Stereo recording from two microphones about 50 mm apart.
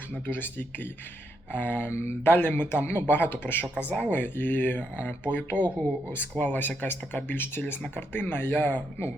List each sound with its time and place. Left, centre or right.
0.1 s speech: left
1.9 s speech: left
2.2 s speech: left